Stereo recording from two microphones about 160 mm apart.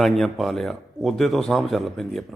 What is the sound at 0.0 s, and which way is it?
Speech, centre (ahead or behind).